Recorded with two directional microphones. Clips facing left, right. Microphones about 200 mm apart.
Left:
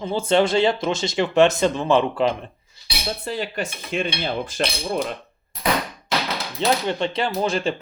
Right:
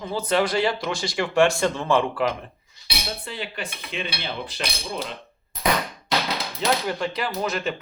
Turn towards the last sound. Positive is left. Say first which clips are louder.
# left 4 dB
turn(degrees=30)  # may be behind; listen again after turning